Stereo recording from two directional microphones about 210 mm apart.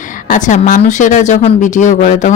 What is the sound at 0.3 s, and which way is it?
Speech, 35° left (ahead or behind).